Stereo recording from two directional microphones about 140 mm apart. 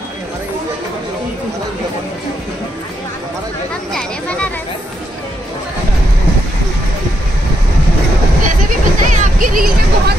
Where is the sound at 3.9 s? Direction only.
5° left (ahead or behind).